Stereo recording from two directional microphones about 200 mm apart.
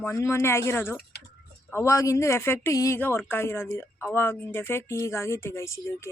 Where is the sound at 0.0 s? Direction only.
15° left (ahead or behind).